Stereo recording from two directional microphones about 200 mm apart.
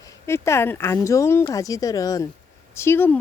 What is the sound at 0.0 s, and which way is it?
Speech, 15° left (ahead or behind).